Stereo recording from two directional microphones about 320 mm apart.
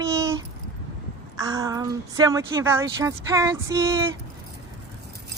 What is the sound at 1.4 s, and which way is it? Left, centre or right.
Speech, centre.